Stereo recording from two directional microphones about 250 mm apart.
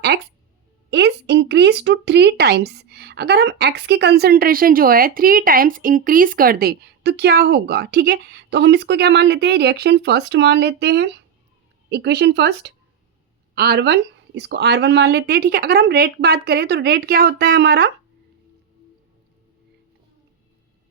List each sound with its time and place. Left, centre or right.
0.9 s speech: right